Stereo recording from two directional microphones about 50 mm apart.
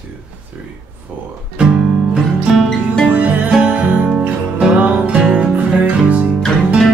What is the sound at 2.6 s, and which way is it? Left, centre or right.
Music, centre.